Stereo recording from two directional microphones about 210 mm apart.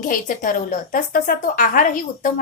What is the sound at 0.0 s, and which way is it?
A woman's voice, 40° left (ahead or behind).